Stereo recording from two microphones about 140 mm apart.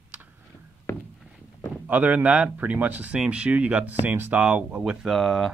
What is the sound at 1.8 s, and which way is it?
Speech, 15° right (ahead or behind).